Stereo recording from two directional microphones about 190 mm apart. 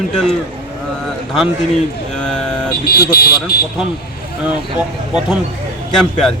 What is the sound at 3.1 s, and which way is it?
Speech, 55° left (ahead or behind).